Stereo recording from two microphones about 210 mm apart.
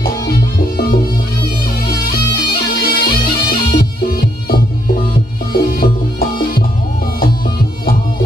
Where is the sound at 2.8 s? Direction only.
45° left (ahead or behind).